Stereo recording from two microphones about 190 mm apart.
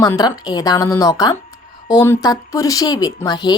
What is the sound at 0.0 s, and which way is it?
A woman's voice, 20° left (ahead or behind).